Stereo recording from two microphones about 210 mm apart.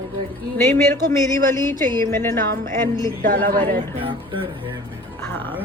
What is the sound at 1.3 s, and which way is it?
A woman's voice, 10° left (ahead or behind).